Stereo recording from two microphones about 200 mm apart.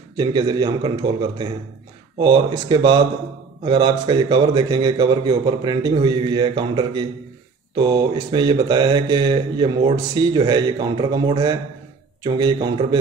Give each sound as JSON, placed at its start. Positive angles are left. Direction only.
{"t": 0.2, "sound": "speech", "side_deg": -20}
{"t": 2.1, "sound": "speech", "side_deg": -25}